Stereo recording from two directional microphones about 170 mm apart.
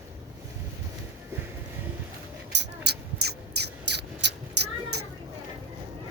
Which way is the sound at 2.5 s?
80° right.